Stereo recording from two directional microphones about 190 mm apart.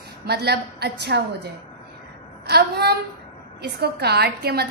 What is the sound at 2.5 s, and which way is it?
A woman's voice, 60° right (ahead or behind).